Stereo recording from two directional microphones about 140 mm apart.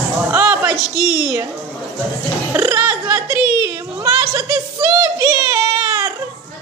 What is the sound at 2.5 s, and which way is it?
Speech, 20° right (ahead or behind).